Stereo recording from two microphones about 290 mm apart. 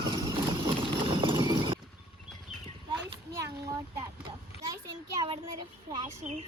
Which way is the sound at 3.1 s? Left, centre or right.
Centre.